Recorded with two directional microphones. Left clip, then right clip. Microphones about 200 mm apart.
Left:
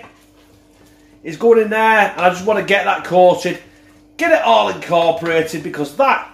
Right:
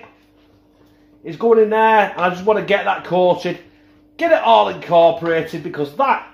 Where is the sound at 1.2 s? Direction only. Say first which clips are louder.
Left 1 dB; 15° right (ahead or behind).